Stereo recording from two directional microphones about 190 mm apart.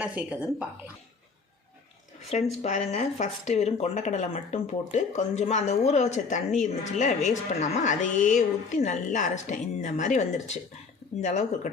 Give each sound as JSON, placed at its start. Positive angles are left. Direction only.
{"t": 0.0, "sound": "speech", "side_deg": -5}
{"t": 2.6, "sound": "speech", "side_deg": 35}